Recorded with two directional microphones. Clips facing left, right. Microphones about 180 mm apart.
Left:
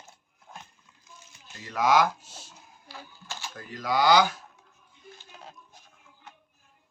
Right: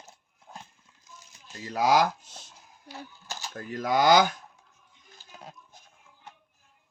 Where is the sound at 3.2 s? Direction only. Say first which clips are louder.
Right 3 dB; 45° right (ahead or behind).